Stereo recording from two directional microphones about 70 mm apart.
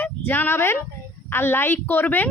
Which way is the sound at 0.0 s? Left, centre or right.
Left.